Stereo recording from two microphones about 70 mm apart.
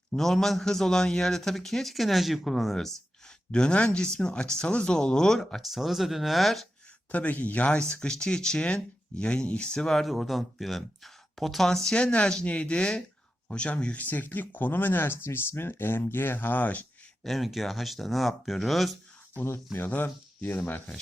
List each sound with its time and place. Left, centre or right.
0.1 s a man's voice: centre
7.1 s a man's voice: left
17.2 s speech: centre
19.9 s speech: left